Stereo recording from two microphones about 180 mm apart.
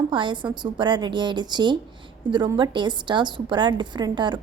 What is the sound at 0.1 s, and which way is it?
A woman's voice, 25° right (ahead or behind).